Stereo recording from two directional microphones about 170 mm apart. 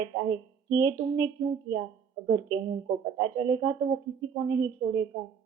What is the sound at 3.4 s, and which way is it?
A woman's voice, 25° right (ahead or behind).